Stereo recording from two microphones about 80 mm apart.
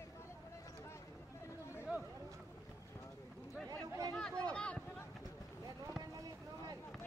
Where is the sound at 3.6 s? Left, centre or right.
Right.